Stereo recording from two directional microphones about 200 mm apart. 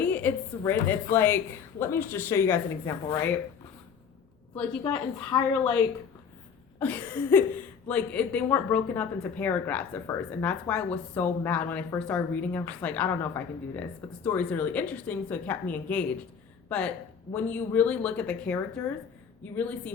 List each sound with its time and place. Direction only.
0.0 s a woman's voice: 10° left (ahead or behind)
4.8 s a woman's voice: 15° left (ahead or behind)
6.7 s a woman's voice: 10° left (ahead or behind)